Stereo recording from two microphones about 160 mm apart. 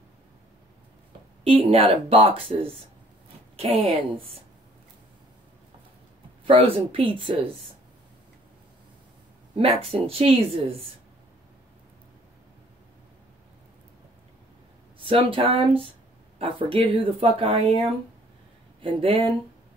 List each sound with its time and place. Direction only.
1.4 s a woman's voice: 35° right (ahead or behind)
6.4 s speech: 35° right (ahead or behind)
9.6 s speech: 40° right (ahead or behind)
15.0 s speech: 35° right (ahead or behind)